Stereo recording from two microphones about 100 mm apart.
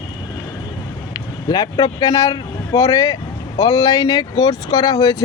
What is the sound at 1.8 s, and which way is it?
Speech, 40° left (ahead or behind).